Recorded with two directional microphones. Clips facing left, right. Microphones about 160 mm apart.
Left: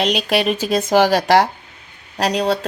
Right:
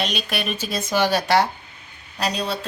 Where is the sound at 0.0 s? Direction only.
90° left.